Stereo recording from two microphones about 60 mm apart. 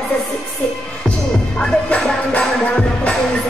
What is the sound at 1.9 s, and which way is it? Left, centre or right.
Music, left.